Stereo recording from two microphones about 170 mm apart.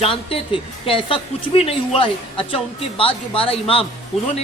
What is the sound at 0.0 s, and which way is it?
Speech, 35° left (ahead or behind).